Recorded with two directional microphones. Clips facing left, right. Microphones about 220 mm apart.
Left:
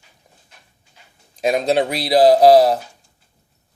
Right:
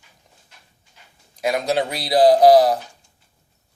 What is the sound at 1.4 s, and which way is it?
A man's voice, 25° left (ahead or behind).